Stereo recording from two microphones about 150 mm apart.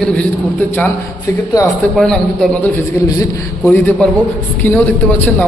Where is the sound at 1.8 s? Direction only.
10° left (ahead or behind).